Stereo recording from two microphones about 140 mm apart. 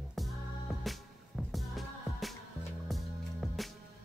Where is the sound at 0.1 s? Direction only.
Centre (ahead or behind).